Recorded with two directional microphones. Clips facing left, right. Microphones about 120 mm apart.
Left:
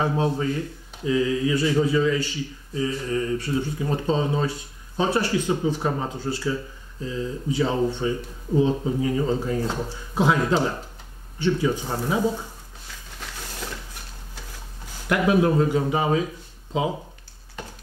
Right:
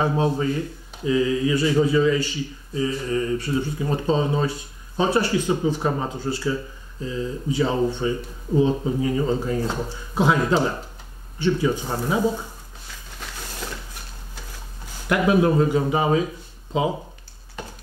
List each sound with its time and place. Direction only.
0.0 s speech: 20° right (ahead or behind)
8.7 s speech: 30° right (ahead or behind)
9.0 s speech: 20° right (ahead or behind)
12.0 s a sound: 25° right (ahead or behind)
15.0 s speech: 15° right (ahead or behind)